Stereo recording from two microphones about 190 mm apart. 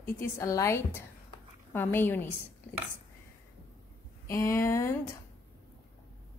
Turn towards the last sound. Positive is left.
turn(degrees=15)  # may be behind; listen again after turning